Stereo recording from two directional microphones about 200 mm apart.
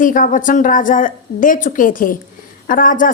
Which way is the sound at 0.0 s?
40° left (ahead or behind).